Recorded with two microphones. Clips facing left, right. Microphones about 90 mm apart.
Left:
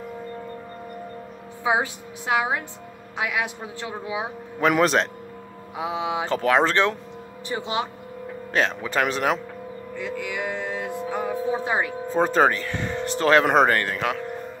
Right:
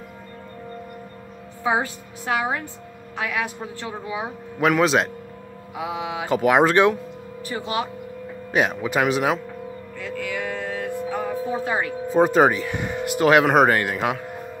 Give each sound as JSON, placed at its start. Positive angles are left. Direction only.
{"t": 1.6, "sound": "a man's voice", "side_deg": 15}
{"t": 4.6, "sound": "a man's voice", "side_deg": 0}
{"t": 5.8, "sound": "speech", "side_deg": 25}
{"t": 6.2, "sound": "speech", "side_deg": -15}
{"t": 7.4, "sound": "speech", "side_deg": 25}
{"t": 8.5, "sound": "speech", "side_deg": -10}
{"t": 9.9, "sound": "music", "side_deg": 20}
{"t": 12.1, "sound": "speech", "side_deg": -10}